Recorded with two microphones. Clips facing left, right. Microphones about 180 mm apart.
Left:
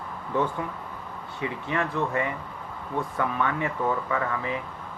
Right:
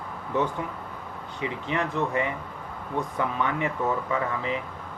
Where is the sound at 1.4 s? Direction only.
20° right (ahead or behind).